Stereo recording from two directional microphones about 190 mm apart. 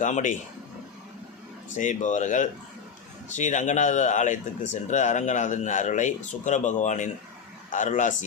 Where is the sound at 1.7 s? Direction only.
40° left (ahead or behind).